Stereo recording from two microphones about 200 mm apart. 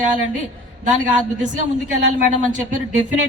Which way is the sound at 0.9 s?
40° right (ahead or behind).